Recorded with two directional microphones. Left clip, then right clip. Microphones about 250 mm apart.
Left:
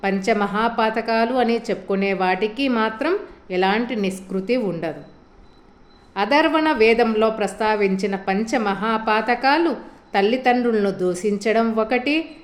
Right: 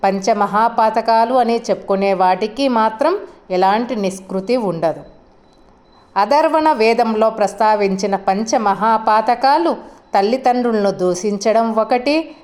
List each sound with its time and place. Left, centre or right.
0.0 s a woman's voice: centre
6.1 s a woman's voice: centre